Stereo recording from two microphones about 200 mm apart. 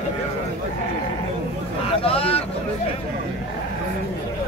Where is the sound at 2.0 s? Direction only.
30° left (ahead or behind).